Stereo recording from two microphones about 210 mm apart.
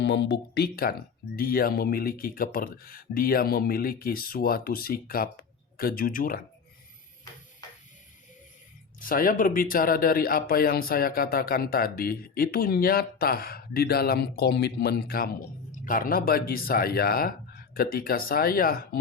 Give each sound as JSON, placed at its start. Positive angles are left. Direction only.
{"t": 0.0, "sound": "speech", "side_deg": 55}
{"t": 9.0, "sound": "speech", "side_deg": 40}